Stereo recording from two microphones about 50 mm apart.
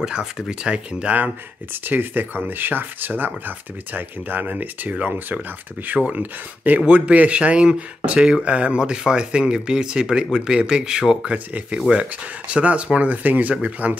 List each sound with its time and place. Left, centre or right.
0.0 s speech: centre